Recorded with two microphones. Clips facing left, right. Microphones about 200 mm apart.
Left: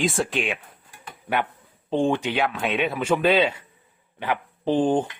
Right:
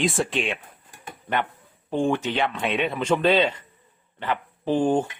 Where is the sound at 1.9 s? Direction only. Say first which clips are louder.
Left 1 dB; 20° left (ahead or behind).